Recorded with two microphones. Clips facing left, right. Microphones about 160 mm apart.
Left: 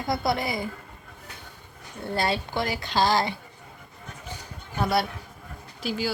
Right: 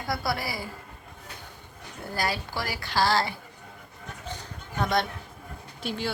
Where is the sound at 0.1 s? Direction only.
20° left (ahead or behind).